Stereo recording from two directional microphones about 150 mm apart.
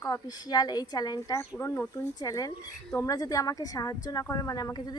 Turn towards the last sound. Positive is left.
turn(degrees=25)  # may be behind; listen again after turning